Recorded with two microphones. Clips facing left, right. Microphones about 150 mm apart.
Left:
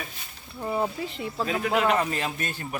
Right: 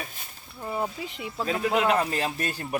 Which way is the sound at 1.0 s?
15° right (ahead or behind).